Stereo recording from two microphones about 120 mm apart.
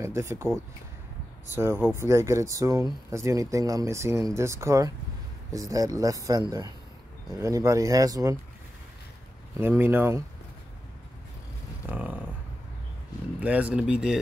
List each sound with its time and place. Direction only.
0.0 s speech: 25° right (ahead or behind)
1.5 s speech: 20° right (ahead or behind)
9.6 s speech: 15° right (ahead or behind)
11.8 s a sound: 10° right (ahead or behind)
13.4 s speech: 10° right (ahead or behind)